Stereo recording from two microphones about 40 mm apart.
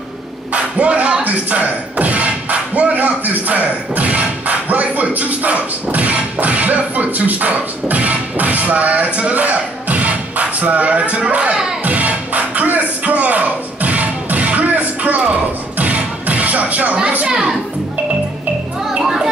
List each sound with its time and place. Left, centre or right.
0.5 s speech: right
11.8 s music: right
17.3 s a child's voice: centre